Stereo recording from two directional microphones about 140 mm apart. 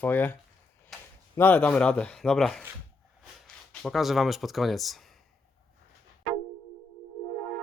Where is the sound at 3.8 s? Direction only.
Centre (ahead or behind).